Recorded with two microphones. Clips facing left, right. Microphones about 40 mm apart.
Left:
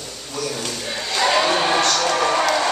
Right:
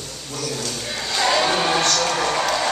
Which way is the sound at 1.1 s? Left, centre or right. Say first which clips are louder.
Left 1 dB; centre.